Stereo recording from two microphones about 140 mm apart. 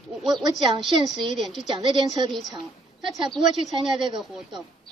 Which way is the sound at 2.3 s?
Centre (ahead or behind).